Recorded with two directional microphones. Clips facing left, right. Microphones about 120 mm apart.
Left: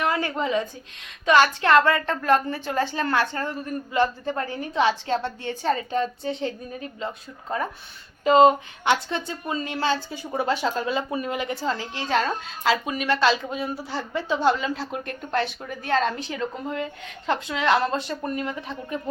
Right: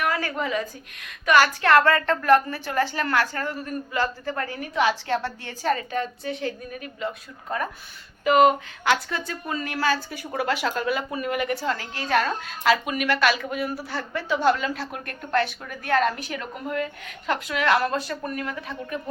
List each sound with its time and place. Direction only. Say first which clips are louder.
0.0 s a woman's voice: left 1 dB; 25° left (ahead or behind)